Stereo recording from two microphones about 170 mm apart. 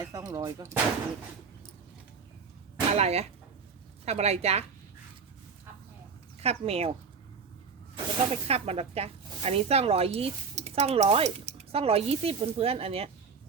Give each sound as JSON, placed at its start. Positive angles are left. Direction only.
{"t": 0.0, "sound": "speech", "side_deg": -20}
{"t": 2.9, "sound": "speech", "side_deg": -40}
{"t": 6.4, "sound": "speech", "side_deg": -35}
{"t": 7.9, "sound": "speech", "side_deg": -35}